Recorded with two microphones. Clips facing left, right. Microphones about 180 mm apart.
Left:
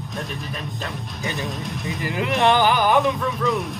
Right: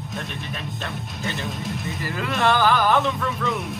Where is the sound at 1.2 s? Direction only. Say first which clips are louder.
Left 2 dB; 15° left (ahead or behind).